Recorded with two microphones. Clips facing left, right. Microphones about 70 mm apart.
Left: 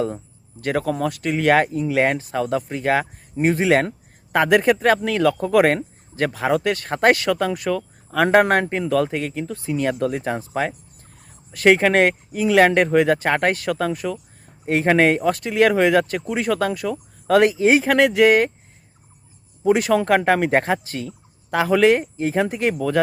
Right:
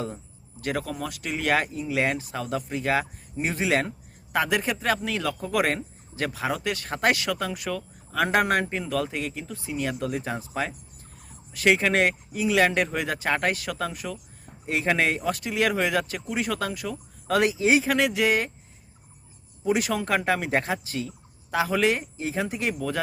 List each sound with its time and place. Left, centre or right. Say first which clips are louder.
0.6 s speech: left 8 dB; left
19.6 s speech: left 8 dB; left